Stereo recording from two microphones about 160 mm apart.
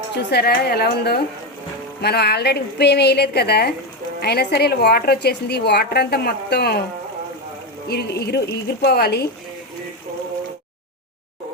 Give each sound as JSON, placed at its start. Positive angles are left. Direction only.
{"t": 0.2, "sound": "a woman's voice", "side_deg": 90}
{"t": 7.9, "sound": "a woman's voice", "side_deg": 85}